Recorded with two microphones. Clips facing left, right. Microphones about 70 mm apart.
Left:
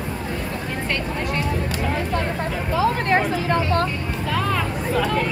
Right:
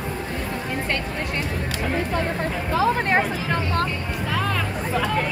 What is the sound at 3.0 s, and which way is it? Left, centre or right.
Vehicle, centre.